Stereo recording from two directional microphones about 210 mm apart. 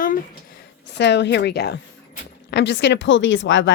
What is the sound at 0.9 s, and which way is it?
A woman's voice, 55° left (ahead or behind).